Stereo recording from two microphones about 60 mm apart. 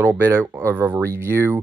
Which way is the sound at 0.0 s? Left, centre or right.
Right.